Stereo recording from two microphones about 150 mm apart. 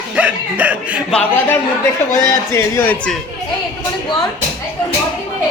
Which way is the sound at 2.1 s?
20° left (ahead or behind).